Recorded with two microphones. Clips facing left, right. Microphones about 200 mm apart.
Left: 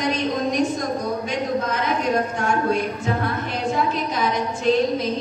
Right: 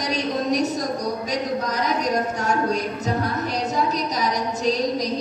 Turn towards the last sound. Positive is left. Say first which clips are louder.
# left 3 dB
turn(degrees=-40)  # may be behind; listen again after turning